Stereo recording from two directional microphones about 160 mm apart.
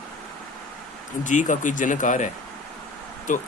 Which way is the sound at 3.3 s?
50° left (ahead or behind).